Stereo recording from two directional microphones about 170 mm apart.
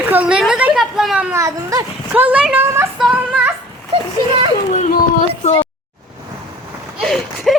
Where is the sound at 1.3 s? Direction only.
20° right (ahead or behind).